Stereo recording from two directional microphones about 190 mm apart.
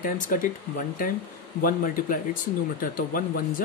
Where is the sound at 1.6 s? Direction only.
50° left (ahead or behind).